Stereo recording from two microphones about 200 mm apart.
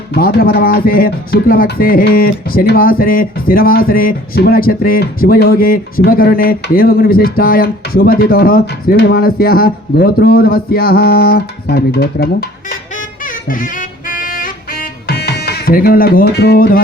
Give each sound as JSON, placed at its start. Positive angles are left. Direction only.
{"t": 0.1, "sound": "speech", "side_deg": 50}
{"t": 13.2, "sound": "music", "side_deg": 45}